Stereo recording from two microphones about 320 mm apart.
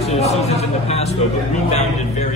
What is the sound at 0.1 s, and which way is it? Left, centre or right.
Speech, centre.